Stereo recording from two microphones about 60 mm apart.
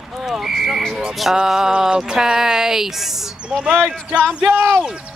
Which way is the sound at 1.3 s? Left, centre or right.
Centre.